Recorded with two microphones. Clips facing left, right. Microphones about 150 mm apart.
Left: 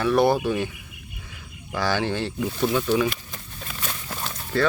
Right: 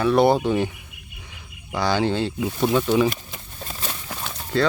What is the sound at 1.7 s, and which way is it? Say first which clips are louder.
Speech: right 3 dB; 15° right (ahead or behind).